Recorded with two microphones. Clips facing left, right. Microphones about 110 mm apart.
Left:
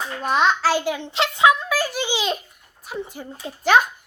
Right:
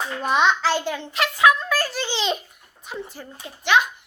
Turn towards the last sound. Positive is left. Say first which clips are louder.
# left 3 dB
turn(degrees=40)  # may be behind; listen again after turning